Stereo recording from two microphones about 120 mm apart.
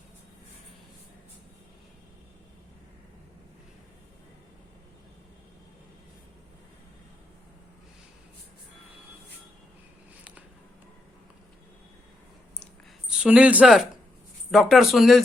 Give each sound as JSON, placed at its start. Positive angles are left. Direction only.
{"t": 13.1, "sound": "speech", "side_deg": -10}